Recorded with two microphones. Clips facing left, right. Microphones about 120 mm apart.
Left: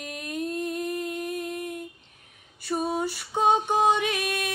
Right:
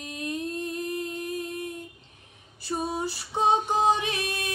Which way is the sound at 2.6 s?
30° right (ahead or behind).